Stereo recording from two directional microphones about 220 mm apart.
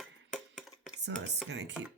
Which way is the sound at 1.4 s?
50° right (ahead or behind).